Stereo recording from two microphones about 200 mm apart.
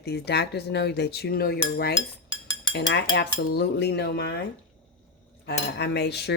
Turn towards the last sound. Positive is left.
turn(degrees=55)  # may be behind; listen again after turning